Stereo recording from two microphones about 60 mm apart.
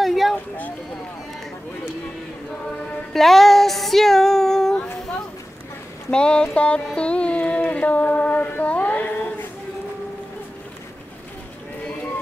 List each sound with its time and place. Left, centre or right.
0.0 s a sound: centre
3.1 s female singing: centre
6.0 s speech: centre
7.0 s child singing: centre